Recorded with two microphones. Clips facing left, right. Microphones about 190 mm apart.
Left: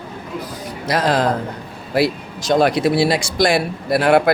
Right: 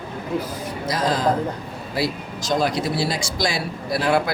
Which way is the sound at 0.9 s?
70° left (ahead or behind).